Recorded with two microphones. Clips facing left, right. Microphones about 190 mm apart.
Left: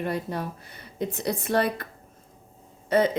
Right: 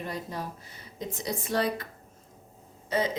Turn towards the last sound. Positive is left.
turn(degrees=60)  # may be behind; listen again after turning